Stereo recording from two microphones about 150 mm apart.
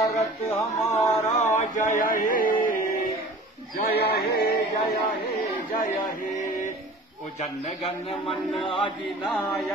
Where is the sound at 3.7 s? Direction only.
80° left.